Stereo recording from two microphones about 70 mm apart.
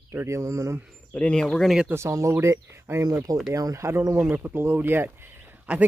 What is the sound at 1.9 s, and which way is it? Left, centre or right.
Speech, right.